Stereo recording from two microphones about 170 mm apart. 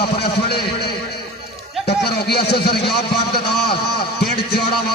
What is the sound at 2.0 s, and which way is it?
A man's voice, 70° left (ahead or behind).